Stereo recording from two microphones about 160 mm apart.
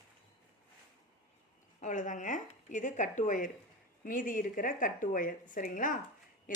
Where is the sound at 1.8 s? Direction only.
50° left (ahead or behind).